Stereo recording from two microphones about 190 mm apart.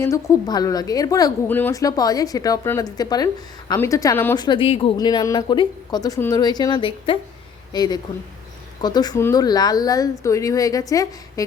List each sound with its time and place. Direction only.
0.0 s speech: 15° left (ahead or behind)
4.4 s speech: 25° left (ahead or behind)